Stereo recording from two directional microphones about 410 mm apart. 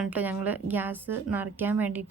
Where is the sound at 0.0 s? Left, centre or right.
Centre.